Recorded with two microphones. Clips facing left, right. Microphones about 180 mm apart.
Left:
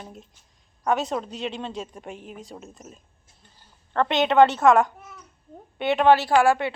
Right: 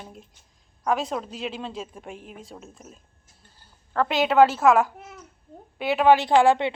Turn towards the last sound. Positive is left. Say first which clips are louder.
# right 1 dB
turn(degrees=-20)  # may be behind; listen again after turning